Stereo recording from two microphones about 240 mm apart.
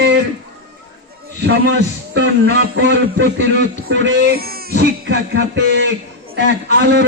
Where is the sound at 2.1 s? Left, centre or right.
Right.